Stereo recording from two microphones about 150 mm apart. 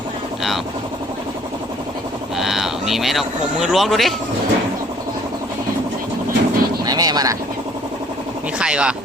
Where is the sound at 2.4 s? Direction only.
Centre (ahead or behind).